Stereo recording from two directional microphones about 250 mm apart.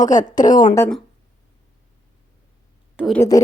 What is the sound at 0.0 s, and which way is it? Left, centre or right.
Speech, left.